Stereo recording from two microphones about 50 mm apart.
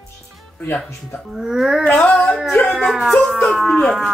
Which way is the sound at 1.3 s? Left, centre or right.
Centre.